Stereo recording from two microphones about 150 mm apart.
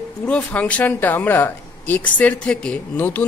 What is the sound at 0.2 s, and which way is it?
Speech, 10° left (ahead or behind).